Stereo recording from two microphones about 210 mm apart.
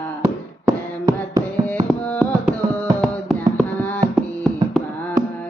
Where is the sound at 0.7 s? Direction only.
15° right (ahead or behind).